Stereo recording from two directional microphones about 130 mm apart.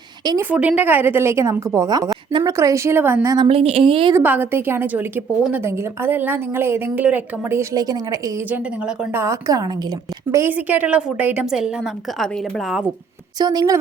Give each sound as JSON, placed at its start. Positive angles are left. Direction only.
{"t": 0.5, "sound": "speech", "side_deg": -10}
{"t": 3.2, "sound": "speech", "side_deg": -35}
{"t": 4.1, "sound": "a woman's voice", "side_deg": -15}
{"t": 8.4, "sound": "a woman's voice", "side_deg": -10}
{"t": 9.1, "sound": "speech", "side_deg": -25}
{"t": 10.3, "sound": "a woman's voice", "side_deg": -15}
{"t": 13.4, "sound": "a woman's voice", "side_deg": -30}